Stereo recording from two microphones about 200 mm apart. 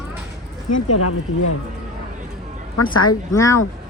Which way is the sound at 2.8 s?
90° left.